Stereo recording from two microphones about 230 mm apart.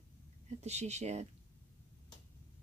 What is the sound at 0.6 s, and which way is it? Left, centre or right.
Speech, right.